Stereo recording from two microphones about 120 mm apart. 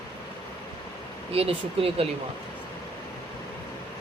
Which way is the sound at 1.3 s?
55° right (ahead or behind).